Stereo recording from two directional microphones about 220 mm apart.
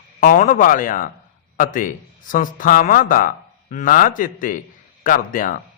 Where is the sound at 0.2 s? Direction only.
40° left (ahead or behind).